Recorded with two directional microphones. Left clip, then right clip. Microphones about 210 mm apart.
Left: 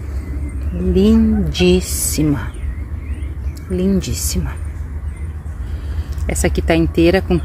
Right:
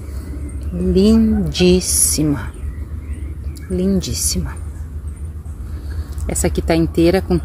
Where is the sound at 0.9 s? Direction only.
15° right (ahead or behind).